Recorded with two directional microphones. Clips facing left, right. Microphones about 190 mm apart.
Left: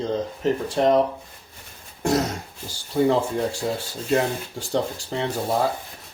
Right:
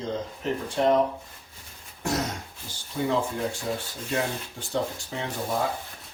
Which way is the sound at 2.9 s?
35° left (ahead or behind).